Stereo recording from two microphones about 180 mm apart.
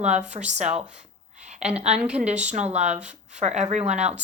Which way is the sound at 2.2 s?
40° right (ahead or behind).